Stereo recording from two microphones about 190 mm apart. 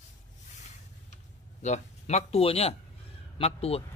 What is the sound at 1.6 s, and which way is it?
Speech, 35° left (ahead or behind).